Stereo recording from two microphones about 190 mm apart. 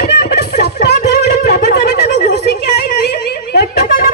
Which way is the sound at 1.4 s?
55° left (ahead or behind).